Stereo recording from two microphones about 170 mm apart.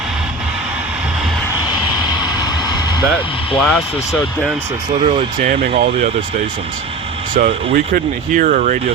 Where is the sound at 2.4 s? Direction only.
25° left (ahead or behind).